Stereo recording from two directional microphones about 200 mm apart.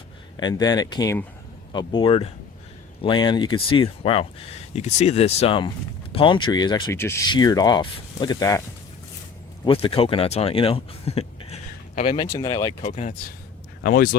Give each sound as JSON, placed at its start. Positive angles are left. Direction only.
{"t": 0.3, "sound": "speech", "side_deg": 20}
{"t": 9.6, "sound": "speech", "side_deg": 25}
{"t": 12.8, "sound": "speech", "side_deg": 35}
{"t": 13.8, "sound": "speech", "side_deg": 45}